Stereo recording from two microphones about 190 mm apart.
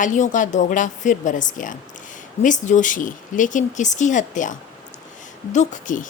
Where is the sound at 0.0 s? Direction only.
40° left (ahead or behind).